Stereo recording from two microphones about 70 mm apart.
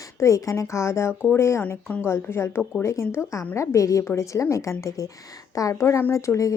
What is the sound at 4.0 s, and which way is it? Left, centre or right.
A woman's voice, left.